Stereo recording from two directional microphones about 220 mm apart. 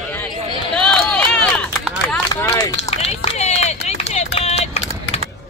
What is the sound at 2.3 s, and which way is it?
Run, 15° left (ahead or behind).